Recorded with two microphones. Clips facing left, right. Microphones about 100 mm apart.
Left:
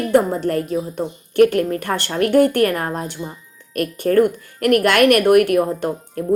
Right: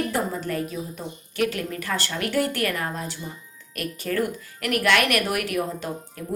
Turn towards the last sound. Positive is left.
turn(degrees=50)  # may be behind; listen again after turning